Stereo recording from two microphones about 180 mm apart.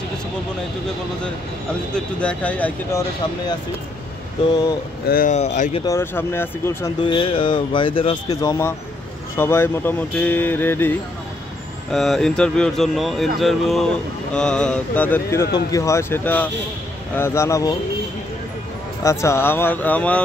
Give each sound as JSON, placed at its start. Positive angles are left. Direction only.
{"t": 2.0, "sound": "speech", "side_deg": 5}
{"t": 5.0, "sound": "speech", "side_deg": 55}
{"t": 5.3, "sound": "speech", "side_deg": 40}
{"t": 5.9, "sound": "speech", "side_deg": 15}
{"t": 7.0, "sound": "speech", "side_deg": 30}
{"t": 11.9, "sound": "speech", "side_deg": 0}
{"t": 19.0, "sound": "speech", "side_deg": 15}